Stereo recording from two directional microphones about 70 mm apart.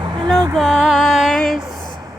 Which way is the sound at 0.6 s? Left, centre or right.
Centre.